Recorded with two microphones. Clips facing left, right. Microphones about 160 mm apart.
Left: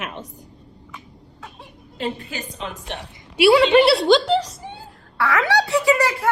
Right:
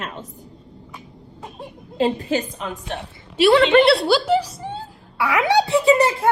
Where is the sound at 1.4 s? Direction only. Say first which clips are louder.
Right 6 dB; 35° right (ahead or behind).